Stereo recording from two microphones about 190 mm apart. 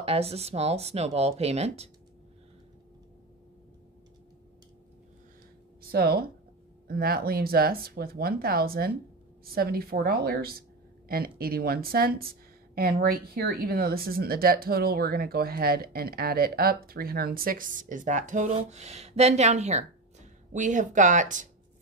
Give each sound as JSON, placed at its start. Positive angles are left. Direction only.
{"t": 0.0, "sound": "speech", "side_deg": -30}
{"t": 5.8, "sound": "speech", "side_deg": -50}